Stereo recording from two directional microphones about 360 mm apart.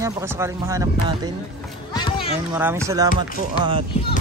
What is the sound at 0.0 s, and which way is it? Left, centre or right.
Speech, centre.